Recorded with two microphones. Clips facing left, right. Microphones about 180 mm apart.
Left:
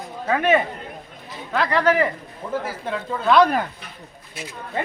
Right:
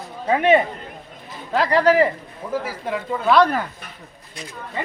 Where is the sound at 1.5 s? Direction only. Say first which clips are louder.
Right 3 dB; 35° right (ahead or behind).